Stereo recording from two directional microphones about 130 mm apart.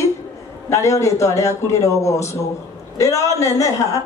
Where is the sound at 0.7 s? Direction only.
25° left (ahead or behind).